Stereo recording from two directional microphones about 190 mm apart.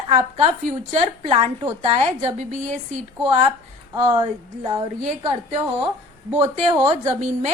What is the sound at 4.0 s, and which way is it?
Speech, 25° right (ahead or behind).